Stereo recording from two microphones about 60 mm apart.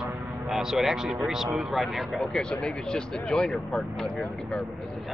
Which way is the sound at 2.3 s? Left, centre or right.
Centre.